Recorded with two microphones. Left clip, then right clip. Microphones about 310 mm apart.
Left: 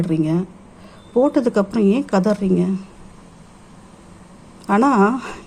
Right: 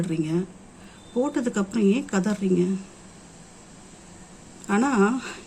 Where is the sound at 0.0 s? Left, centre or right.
Centre.